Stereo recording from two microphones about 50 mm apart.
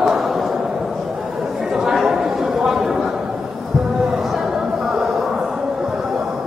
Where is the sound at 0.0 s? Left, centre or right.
Centre.